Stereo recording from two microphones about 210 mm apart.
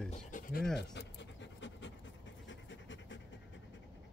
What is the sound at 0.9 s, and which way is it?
Pant, 55° left (ahead or behind).